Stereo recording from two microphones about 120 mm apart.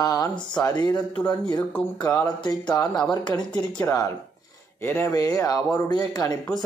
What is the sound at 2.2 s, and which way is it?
Speech, 35° left (ahead or behind).